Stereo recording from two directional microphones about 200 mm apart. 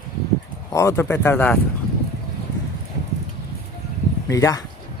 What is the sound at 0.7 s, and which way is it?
Speech, 15° left (ahead or behind).